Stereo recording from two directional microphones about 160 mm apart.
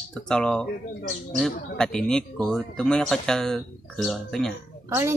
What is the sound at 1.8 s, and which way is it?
Speech, 5° left (ahead or behind).